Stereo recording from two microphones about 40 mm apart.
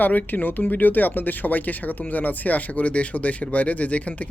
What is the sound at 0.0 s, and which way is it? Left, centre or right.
Speech, left.